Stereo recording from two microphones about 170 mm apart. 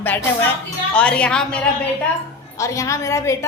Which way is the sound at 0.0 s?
10° left (ahead or behind).